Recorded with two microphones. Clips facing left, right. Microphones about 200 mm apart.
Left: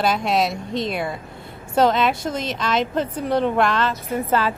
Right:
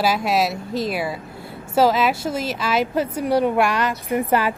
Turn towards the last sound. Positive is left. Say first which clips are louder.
# right 2 dB
turn(degrees=-15)  # may be behind; listen again after turning